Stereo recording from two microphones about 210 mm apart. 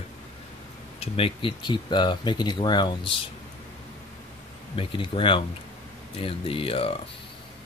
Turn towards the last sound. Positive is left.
turn(degrees=25)  # may be behind; listen again after turning